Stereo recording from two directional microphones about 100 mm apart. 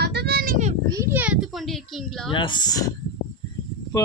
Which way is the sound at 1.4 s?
Centre (ahead or behind).